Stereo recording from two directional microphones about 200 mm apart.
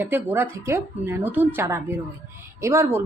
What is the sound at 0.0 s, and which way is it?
Speech, 10° right (ahead or behind).